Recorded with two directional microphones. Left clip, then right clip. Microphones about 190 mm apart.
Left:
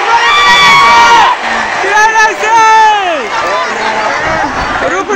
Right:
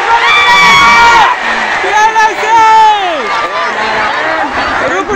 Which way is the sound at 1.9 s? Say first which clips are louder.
Left 1 dB; centre (ahead or behind).